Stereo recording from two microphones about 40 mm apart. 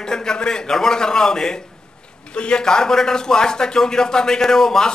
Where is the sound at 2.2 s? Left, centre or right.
Left.